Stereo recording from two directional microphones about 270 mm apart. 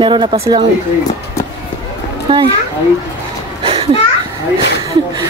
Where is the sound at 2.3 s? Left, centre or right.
Centre.